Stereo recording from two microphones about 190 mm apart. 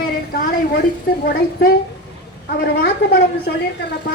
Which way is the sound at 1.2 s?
50° left (ahead or behind).